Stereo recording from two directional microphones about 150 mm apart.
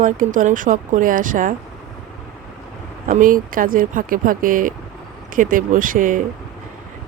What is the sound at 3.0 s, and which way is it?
Speech, 60° right (ahead or behind).